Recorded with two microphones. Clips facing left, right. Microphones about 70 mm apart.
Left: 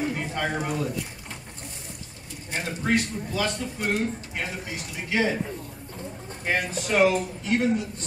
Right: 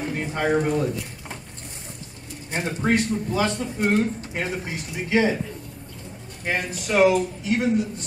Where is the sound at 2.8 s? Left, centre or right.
Right.